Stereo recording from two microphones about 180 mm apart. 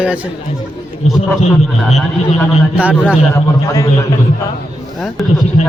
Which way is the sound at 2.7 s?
5° right (ahead or behind).